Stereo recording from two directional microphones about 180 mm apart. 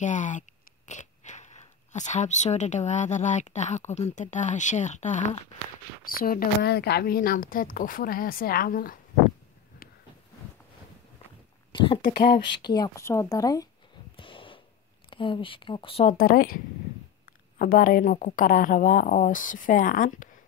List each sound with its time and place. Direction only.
0.0 s speech: 45° left (ahead or behind)
6.0 s speech: 55° left (ahead or behind)
11.7 s speech: 30° left (ahead or behind)
14.1 s a sound: 30° left (ahead or behind)
15.0 s speech: 30° left (ahead or behind)
16.1 s speech: 55° left (ahead or behind)